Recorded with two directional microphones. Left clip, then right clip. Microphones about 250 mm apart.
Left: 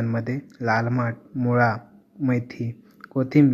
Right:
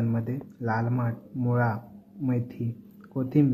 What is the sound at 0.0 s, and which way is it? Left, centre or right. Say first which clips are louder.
A man's voice: left 4 dB; left.